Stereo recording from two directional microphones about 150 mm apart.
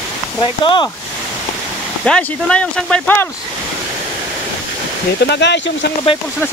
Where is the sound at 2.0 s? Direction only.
5° left (ahead or behind).